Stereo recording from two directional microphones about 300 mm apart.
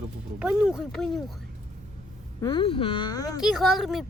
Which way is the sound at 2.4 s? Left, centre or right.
Centre.